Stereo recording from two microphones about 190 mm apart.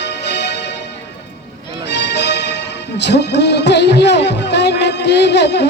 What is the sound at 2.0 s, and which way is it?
Music, 65° left (ahead or behind).